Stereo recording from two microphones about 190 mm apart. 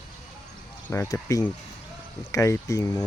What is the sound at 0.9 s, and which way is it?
Speech, 15° left (ahead or behind).